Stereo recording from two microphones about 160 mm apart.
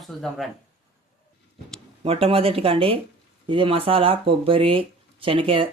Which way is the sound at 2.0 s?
35° right (ahead or behind).